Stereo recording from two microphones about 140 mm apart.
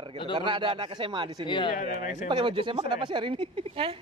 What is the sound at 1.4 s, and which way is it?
Speech, 35° left (ahead or behind).